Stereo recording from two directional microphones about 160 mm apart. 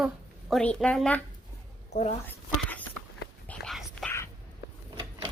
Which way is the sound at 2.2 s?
10° left (ahead or behind).